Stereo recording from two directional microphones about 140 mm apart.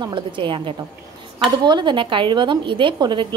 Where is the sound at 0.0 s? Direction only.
35° right (ahead or behind).